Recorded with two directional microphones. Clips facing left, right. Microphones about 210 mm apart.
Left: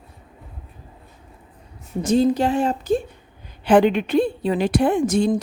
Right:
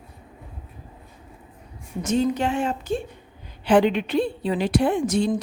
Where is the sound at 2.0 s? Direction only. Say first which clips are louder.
Left 4 dB; 35° left (ahead or behind).